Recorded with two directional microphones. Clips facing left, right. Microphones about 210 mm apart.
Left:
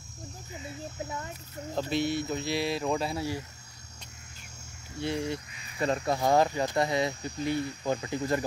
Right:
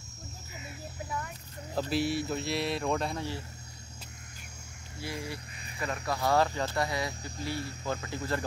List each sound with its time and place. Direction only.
0.5 s a sound: 30° left (ahead or behind)
1.9 s speech: 5° right (ahead or behind)
5.0 s speech: 25° left (ahead or behind)